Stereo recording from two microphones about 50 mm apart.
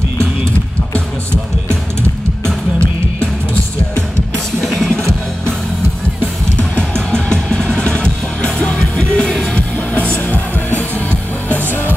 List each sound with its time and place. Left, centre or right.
4.6 s music: centre
6.9 s music: centre; by 11.6 s left